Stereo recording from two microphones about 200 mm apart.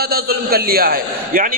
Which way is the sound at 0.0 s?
50° right (ahead or behind).